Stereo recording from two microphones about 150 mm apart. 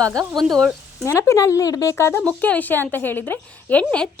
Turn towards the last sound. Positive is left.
turn(degrees=10)  # may be behind; listen again after turning